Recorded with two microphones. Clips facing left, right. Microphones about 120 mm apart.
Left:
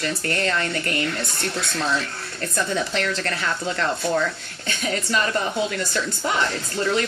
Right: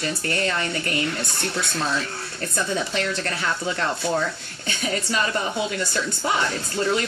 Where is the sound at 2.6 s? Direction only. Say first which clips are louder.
Left 1 dB; 55° left (ahead or behind).